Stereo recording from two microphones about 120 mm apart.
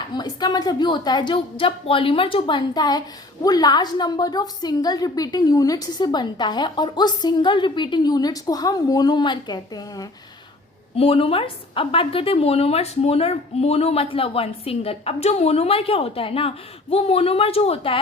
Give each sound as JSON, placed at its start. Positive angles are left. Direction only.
{"t": 0.1, "sound": "a woman's voice", "side_deg": 35}
{"t": 10.9, "sound": "a woman's voice", "side_deg": 55}